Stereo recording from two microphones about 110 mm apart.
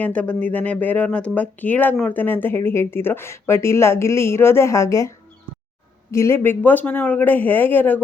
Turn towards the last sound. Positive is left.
turn(degrees=15)  # may be behind; listen again after turning